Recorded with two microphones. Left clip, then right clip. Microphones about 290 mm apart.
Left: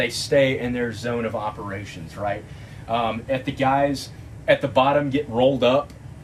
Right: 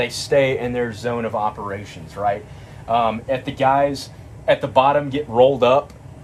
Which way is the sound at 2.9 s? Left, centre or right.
Centre.